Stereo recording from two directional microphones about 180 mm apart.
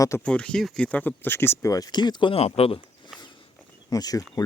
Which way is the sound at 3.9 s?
20° left (ahead or behind).